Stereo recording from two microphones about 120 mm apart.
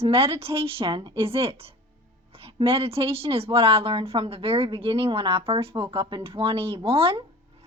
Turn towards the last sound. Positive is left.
turn(degrees=-50)  # may be behind; listen again after turning